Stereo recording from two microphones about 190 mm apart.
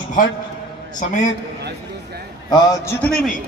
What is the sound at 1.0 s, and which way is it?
Speech, 40° left (ahead or behind).